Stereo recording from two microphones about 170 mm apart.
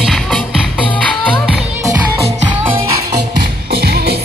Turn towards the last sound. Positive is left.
turn(degrees=-70)  # may be behind; listen again after turning